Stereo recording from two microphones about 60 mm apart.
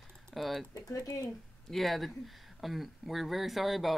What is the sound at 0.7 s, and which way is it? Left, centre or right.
Speech, left.